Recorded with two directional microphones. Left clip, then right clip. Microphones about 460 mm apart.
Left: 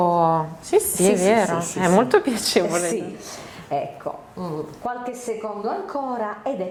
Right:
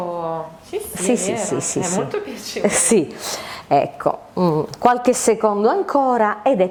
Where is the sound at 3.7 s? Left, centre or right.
Right.